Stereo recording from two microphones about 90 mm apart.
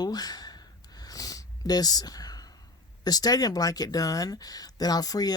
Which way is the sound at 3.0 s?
45° left (ahead or behind).